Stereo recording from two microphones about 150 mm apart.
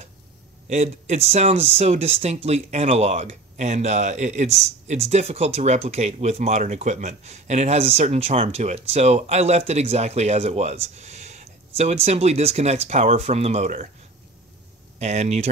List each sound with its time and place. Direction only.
0.7 s speech: 50° right (ahead or behind)
15.0 s speech: 50° right (ahead or behind)